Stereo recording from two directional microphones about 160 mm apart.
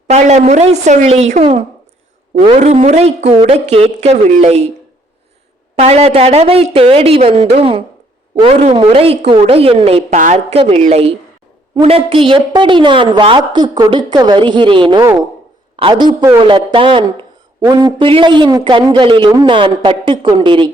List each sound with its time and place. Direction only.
0.1 s a woman's voice: 45° right (ahead or behind)
5.7 s a woman's voice: 40° right (ahead or behind)
10.2 s a woman's voice: 55° right (ahead or behind)
10.5 s a woman's voice: 40° right (ahead or behind)